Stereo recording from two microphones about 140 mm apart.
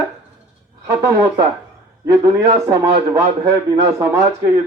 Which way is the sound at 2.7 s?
20° right (ahead or behind).